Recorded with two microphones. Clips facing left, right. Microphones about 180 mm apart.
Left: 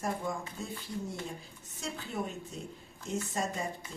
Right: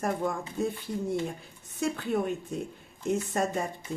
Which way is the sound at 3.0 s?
60° right (ahead or behind).